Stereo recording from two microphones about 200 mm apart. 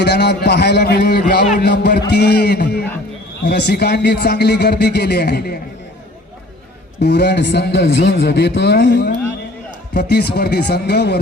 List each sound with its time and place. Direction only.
0.0 s a man's voice: 55° left (ahead or behind)
7.0 s a man's voice: 55° left (ahead or behind)